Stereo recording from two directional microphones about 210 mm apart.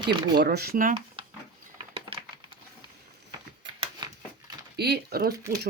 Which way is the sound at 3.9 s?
20° right (ahead or behind).